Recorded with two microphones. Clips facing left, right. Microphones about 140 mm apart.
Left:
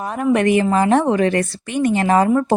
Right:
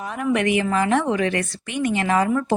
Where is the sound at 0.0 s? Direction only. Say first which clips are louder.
Left 5 dB; 35° left (ahead or behind).